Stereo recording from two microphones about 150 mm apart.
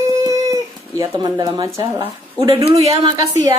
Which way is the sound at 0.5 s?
25° right (ahead or behind).